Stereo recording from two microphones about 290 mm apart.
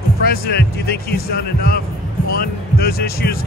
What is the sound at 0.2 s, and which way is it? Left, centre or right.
Speech, left.